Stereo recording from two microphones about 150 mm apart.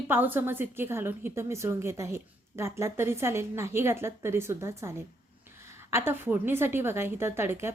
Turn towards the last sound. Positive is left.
turn(degrees=-15)  # may be behind; listen again after turning